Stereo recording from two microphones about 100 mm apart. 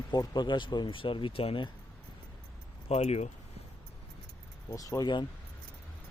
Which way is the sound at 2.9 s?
90° left.